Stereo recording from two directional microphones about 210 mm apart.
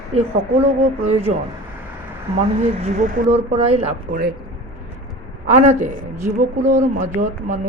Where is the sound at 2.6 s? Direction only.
30° right (ahead or behind).